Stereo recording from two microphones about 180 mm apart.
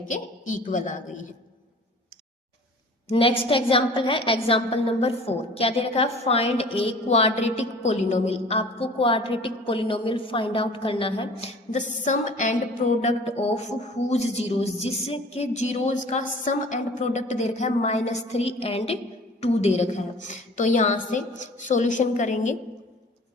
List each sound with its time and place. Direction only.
0.0 s a woman's voice: 45° left (ahead or behind)
3.1 s a woman's voice: 30° left (ahead or behind)